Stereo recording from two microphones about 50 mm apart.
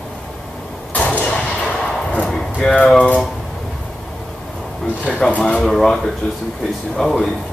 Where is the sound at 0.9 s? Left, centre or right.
Left.